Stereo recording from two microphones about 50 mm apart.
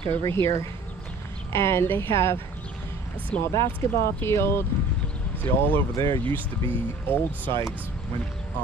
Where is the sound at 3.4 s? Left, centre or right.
Left.